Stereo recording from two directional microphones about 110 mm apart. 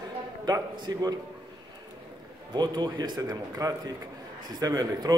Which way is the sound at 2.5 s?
40° right (ahead or behind).